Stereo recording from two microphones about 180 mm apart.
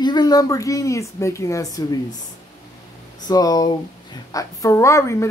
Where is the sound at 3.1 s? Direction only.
20° left (ahead or behind).